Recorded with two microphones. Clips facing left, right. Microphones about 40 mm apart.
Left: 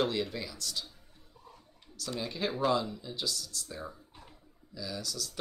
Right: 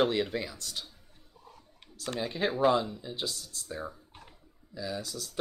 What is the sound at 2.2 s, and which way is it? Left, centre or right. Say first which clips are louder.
Speech: right 4 dB; right.